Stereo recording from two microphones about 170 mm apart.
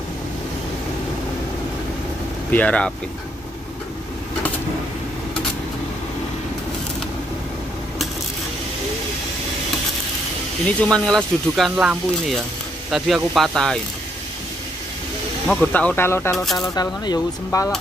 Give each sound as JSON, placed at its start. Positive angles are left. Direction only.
{"t": 2.5, "sound": "speech", "side_deg": 10}
{"t": 10.8, "sound": "speech", "side_deg": 5}
{"t": 15.4, "sound": "speech", "side_deg": 5}